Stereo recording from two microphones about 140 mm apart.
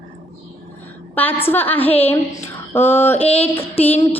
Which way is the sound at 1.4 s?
15° left (ahead or behind).